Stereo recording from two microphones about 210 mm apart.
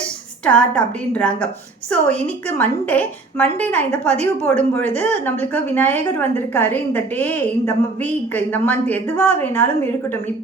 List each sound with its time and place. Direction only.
0.4 s a woman's voice: 5° left (ahead or behind)